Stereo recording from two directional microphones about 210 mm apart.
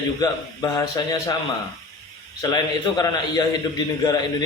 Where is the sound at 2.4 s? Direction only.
20° left (ahead or behind).